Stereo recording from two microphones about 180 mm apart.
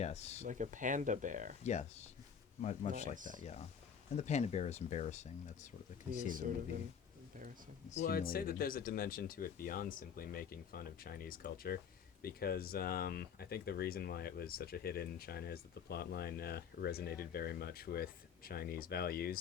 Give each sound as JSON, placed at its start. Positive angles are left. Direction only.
{"t": 0.0, "sound": "speech", "side_deg": 35}
{"t": 0.4, "sound": "speech", "side_deg": -45}
{"t": 1.6, "sound": "speech", "side_deg": 40}
{"t": 3.2, "sound": "speech", "side_deg": -45}
{"t": 3.4, "sound": "speech", "side_deg": 40}
{"t": 6.2, "sound": "speech", "side_deg": -50}
{"t": 7.9, "sound": "speech", "side_deg": 40}
{"t": 8.1, "sound": "speech", "side_deg": 55}